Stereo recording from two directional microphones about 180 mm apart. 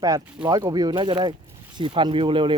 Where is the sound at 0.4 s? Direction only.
20° right (ahead or behind).